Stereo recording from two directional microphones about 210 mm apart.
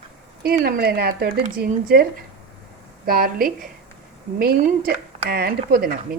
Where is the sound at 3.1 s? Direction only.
45° right (ahead or behind).